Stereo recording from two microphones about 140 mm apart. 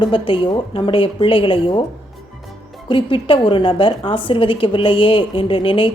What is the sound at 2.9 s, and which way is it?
A woman's voice, 40° left (ahead or behind).